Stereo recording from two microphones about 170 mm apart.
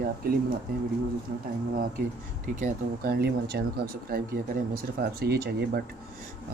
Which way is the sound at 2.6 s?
65° right (ahead or behind).